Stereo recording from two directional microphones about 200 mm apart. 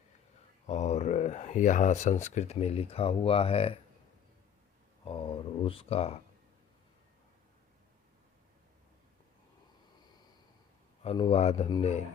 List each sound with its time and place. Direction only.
0.7 s speech: 35° left (ahead or behind)
5.0 s speech: 25° left (ahead or behind)
11.0 s speech: 30° left (ahead or behind)